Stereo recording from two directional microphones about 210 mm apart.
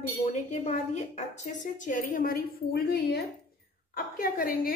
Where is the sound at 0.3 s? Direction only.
35° left (ahead or behind).